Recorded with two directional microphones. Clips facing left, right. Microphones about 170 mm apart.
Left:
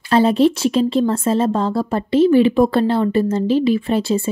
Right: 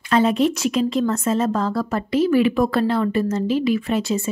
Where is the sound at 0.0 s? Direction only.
30° left (ahead or behind).